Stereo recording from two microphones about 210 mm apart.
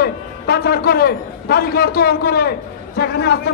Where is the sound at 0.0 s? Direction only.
45° left (ahead or behind).